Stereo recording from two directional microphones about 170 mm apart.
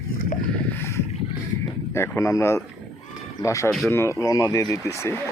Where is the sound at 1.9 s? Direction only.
15° left (ahead or behind).